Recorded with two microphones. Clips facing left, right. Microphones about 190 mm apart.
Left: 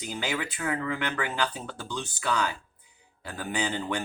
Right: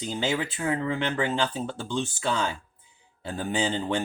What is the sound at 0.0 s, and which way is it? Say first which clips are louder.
Speech: right 4 dB; 25° right (ahead or behind).